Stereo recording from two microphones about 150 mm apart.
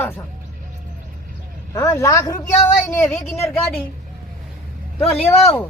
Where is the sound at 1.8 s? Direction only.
20° left (ahead or behind).